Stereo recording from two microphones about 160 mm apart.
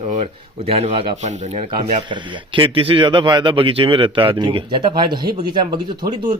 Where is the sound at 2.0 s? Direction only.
30° right (ahead or behind).